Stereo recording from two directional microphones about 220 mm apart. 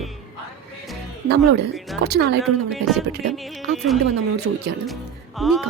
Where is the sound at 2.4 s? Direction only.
Centre (ahead or behind).